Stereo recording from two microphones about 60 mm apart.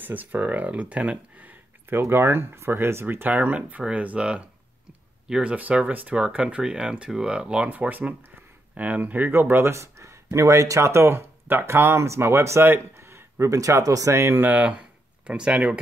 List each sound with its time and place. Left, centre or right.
0.0 s speech: right
1.9 s speech: right
9.3 s speech: right
14.1 s speech: right
14.4 s speech: right